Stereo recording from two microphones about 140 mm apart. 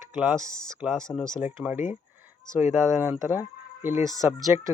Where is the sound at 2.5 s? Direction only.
20° right (ahead or behind).